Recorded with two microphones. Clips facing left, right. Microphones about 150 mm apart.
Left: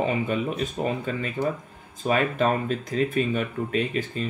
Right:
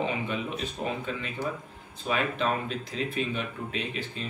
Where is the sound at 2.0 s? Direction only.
45° left (ahead or behind).